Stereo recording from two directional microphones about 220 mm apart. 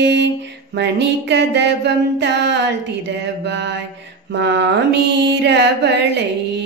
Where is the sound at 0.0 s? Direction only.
50° right (ahead or behind).